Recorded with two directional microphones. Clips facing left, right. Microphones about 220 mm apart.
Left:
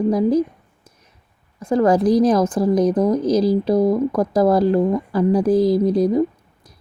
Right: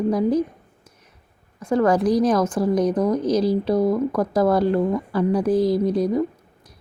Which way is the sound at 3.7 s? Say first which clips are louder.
Left 2 dB; 20° left (ahead or behind).